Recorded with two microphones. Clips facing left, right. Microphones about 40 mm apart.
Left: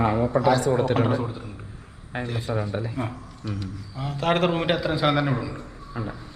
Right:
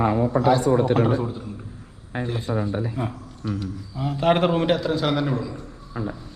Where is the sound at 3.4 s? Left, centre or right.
Centre.